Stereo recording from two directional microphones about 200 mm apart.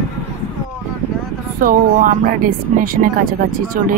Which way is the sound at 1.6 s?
45° right (ahead or behind).